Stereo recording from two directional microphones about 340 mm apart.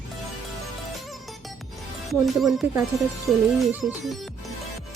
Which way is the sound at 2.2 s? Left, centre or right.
Centre.